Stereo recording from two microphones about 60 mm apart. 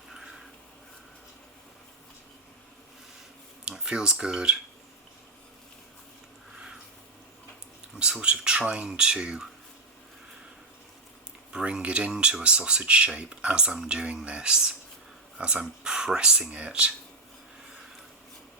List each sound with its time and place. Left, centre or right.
0.1 s a sound: centre
3.7 s speech: centre
7.9 s speech: centre
11.5 s speech: centre